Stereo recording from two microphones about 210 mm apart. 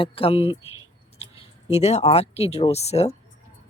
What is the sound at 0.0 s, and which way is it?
Speech, 25° left (ahead or behind).